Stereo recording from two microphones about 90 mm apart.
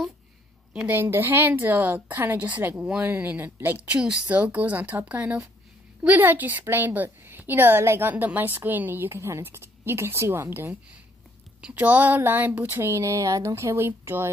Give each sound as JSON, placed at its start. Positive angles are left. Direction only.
{"t": 0.8, "sound": "a woman's voice", "side_deg": -25}